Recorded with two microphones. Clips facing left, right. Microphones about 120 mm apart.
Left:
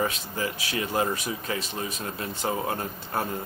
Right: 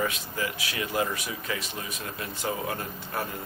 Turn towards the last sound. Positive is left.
turn(degrees=35)  # may be behind; listen again after turning